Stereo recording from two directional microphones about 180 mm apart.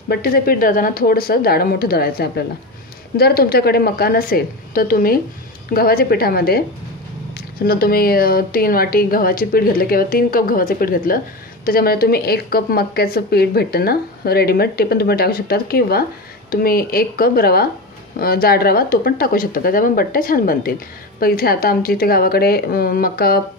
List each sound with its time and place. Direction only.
0.1 s a woman's voice: 60° left (ahead or behind)